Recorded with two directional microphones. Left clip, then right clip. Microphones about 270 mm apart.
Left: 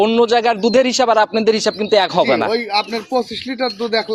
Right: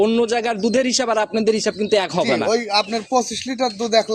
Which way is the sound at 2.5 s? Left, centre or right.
Right.